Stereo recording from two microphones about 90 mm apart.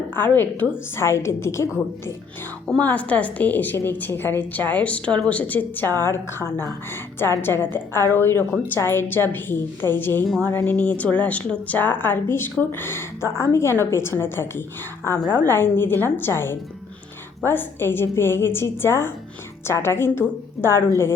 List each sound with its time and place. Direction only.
0.1 s a woman's voice: 25° left (ahead or behind)
2.6 s a woman's voice: 15° left (ahead or behind)